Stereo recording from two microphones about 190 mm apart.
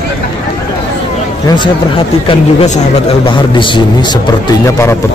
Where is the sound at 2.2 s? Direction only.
40° left (ahead or behind).